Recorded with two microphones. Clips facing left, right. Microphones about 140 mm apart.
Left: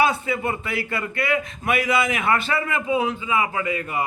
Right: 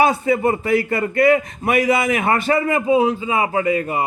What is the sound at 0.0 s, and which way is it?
A man's voice, 40° right (ahead or behind).